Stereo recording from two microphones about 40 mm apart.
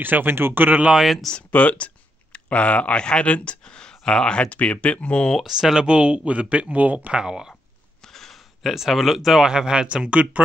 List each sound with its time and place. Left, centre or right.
0.0 s speech: right
1.5 s speech: left
3.6 s a sound: centre
4.0 s speech: left
4.5 s speech: left
5.4 s speech: centre
5.8 s speech: right
7.2 s speech: centre
8.0 s speech: centre; by 10.4 s right